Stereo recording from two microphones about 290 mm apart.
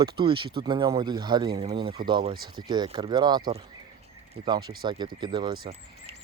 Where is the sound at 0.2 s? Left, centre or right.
Centre.